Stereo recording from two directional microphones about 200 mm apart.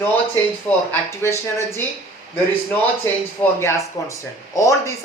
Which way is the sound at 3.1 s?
10° left (ahead or behind).